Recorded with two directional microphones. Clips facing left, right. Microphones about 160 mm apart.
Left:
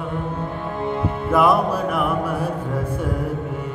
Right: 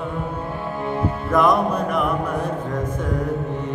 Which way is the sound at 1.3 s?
5° left (ahead or behind).